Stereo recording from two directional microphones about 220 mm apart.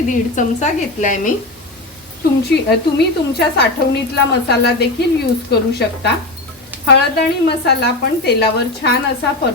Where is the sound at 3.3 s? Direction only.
50° left (ahead or behind).